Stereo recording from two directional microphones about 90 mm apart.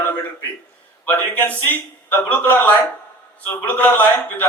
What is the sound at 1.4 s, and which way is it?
A man's voice, 20° left (ahead or behind).